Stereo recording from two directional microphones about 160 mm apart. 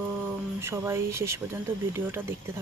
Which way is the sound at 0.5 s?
15° right (ahead or behind).